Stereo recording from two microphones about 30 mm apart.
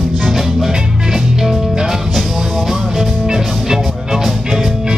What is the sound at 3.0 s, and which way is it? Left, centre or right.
Music, centre.